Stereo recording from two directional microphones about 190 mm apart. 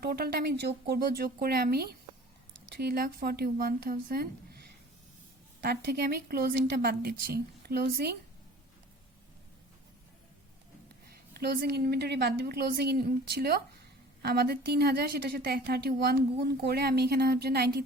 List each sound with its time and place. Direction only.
0.0 s a woman's voice: 55° right (ahead or behind)
5.6 s a woman's voice: 60° right (ahead or behind)
11.3 s a woman's voice: 60° right (ahead or behind)